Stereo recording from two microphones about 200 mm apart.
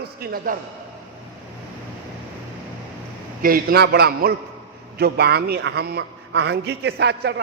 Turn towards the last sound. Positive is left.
turn(degrees=-60)  # may be behind; listen again after turning